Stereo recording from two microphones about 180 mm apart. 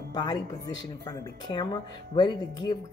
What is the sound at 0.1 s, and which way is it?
Speech, 25° left (ahead or behind).